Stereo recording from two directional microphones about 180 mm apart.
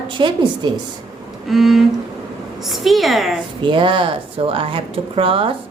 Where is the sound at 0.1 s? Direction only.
25° right (ahead or behind).